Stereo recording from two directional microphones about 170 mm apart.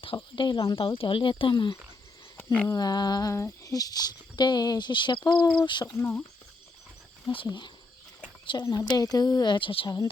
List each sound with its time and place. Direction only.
0.2 s speech: 25° left (ahead or behind)
2.4 s a sound: 5° left (ahead or behind)
2.6 s speech: 25° left (ahead or behind)
5.9 s speech: 10° left (ahead or behind)
7.3 s speech: 30° left (ahead or behind)